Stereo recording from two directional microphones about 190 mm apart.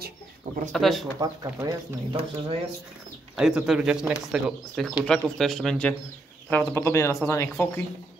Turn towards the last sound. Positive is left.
turn(degrees=15)  # may be behind; listen again after turning